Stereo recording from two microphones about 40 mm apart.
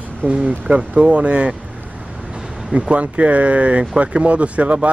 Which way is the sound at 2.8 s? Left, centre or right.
Right.